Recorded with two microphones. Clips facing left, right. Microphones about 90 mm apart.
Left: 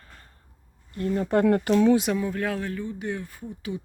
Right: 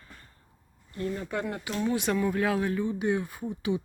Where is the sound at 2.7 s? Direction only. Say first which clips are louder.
Right 4 dB; 15° right (ahead or behind).